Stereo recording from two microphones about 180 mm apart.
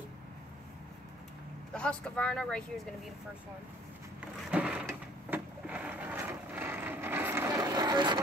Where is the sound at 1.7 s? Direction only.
5° left (ahead or behind).